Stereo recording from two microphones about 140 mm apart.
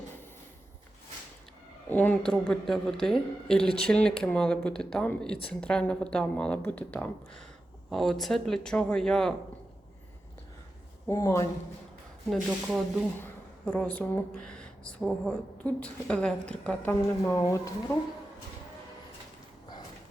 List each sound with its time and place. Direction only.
1.9 s speech: 10° left (ahead or behind)
11.1 s speech: 20° left (ahead or behind)
12.3 s speech: 5° right (ahead or behind)
13.2 s speech: 10° left (ahead or behind)
17.3 s speech: 25° left (ahead or behind)